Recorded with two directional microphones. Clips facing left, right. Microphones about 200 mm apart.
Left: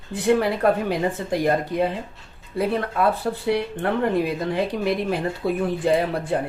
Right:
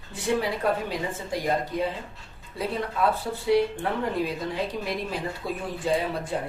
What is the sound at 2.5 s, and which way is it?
Speech, 60° left (ahead or behind).